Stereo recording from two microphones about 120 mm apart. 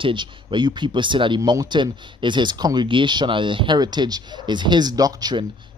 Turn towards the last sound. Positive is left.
turn(degrees=-35)  # may be behind; listen again after turning